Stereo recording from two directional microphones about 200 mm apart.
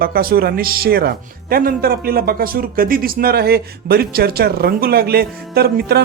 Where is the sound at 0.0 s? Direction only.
50° right (ahead or behind).